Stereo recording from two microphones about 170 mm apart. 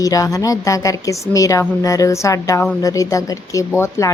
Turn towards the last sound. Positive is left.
turn(degrees=15)  # may be behind; listen again after turning